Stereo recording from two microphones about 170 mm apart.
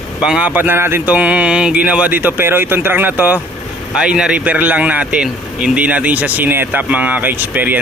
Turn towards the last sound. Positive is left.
turn(degrees=-10)  # may be behind; listen again after turning